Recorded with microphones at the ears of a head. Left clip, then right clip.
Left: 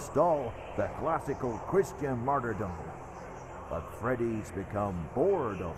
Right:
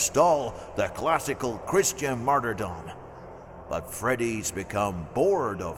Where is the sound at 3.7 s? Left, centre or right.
Right.